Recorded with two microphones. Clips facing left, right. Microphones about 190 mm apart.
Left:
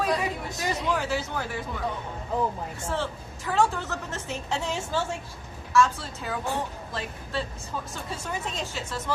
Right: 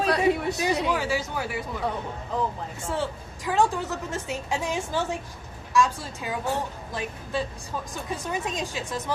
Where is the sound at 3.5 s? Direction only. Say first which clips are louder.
Right 1 dB; 15° right (ahead or behind).